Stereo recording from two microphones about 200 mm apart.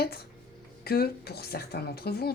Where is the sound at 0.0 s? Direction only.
50° left (ahead or behind).